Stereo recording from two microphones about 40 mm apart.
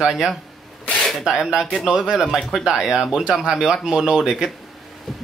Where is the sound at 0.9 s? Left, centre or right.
Centre.